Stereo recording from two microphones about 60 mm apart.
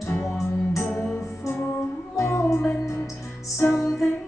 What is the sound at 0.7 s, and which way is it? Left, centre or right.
Music, left.